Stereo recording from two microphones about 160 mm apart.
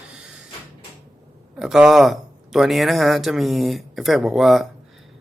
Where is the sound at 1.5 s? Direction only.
5° right (ahead or behind).